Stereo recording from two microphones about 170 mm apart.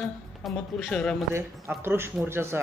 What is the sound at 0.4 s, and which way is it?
Speech, centre (ahead or behind).